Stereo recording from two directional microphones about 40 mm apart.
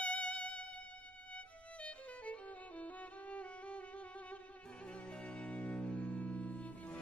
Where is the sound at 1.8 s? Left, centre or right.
Left.